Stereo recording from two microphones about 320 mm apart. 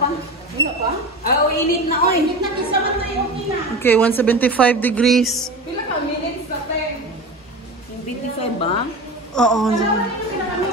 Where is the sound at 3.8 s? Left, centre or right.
Centre.